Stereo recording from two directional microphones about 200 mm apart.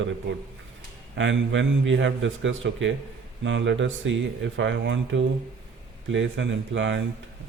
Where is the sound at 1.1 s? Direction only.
65° right (ahead or behind).